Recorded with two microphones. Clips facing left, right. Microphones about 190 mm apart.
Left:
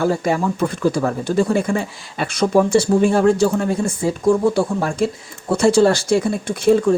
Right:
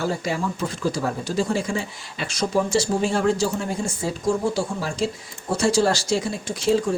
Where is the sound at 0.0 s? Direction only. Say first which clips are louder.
Left 7 dB; 55° left (ahead or behind).